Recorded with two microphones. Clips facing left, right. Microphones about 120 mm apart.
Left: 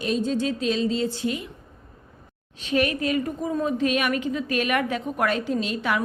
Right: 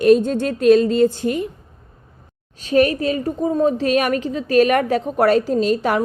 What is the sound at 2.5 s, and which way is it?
A woman's voice, 40° right (ahead or behind).